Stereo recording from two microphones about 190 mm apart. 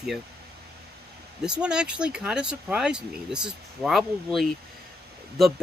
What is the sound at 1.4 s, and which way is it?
Speech, 5° right (ahead or behind).